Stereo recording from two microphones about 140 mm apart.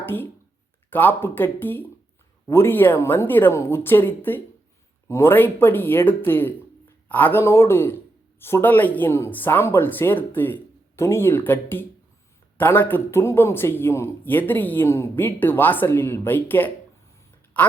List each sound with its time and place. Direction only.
0.0 s a man's voice: 15° left (ahead or behind)